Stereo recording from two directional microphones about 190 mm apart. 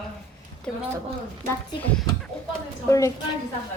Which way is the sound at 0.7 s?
Centre (ahead or behind).